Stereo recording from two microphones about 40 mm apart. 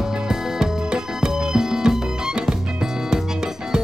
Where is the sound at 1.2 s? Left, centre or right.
Centre.